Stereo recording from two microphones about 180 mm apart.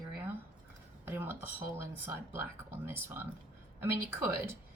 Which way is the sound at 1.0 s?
10° right (ahead or behind).